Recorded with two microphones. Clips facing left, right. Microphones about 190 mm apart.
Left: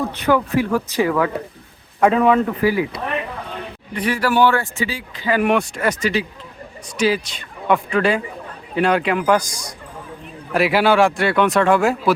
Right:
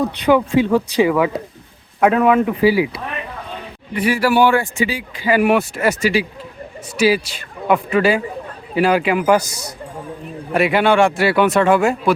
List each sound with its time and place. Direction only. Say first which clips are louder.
0.2 s speech: right 3 dB; 20° right (ahead or behind)
3.9 s a man's voice: right 3 dB; 10° right (ahead or behind)